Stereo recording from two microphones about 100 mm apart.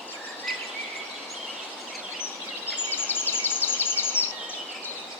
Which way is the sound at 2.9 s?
20° left (ahead or behind).